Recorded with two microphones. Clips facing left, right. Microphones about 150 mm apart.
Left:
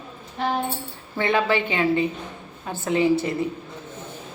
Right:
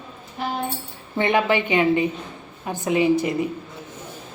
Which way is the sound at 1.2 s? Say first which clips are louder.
Right 2 dB; 20° right (ahead or behind).